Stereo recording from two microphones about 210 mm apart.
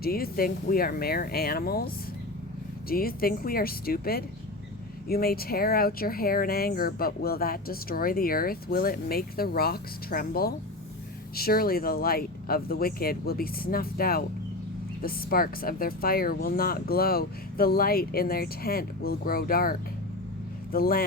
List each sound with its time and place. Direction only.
0.0 s speech: 45° left (ahead or behind)
2.9 s speech: 45° left (ahead or behind)
20.7 s speech: 45° left (ahead or behind)